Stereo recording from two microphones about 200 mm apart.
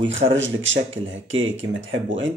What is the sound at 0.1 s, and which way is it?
Speech, 70° right (ahead or behind).